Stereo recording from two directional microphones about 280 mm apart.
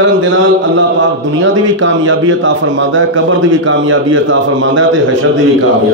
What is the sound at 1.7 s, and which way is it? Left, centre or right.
A man's voice, right.